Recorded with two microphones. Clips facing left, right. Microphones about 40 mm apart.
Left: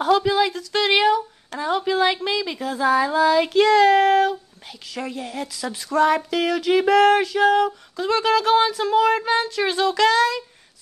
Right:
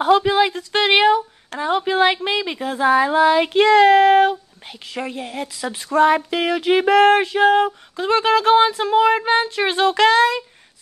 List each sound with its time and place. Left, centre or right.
0.0 s speech: right